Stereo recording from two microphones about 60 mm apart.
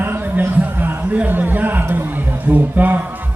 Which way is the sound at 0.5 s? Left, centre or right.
Right.